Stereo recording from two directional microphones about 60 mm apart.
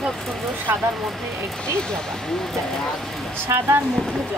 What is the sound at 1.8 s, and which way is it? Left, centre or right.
Speech, centre.